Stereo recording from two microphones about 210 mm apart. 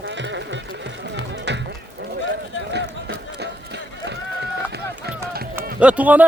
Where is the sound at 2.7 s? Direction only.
55° right (ahead or behind).